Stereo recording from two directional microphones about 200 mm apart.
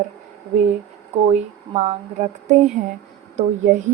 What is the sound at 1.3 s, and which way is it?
Speech, 30° right (ahead or behind).